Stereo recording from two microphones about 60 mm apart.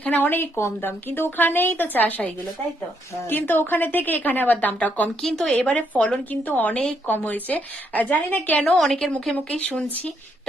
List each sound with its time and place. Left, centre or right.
0.0 s speech: left
5.2 s speech: centre
5.5 s a woman's voice: left
8.8 s a woman's voice: centre
9.3 s a woman's voice: centre